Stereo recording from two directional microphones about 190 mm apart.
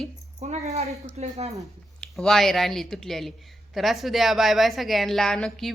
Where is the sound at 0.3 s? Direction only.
35° right (ahead or behind).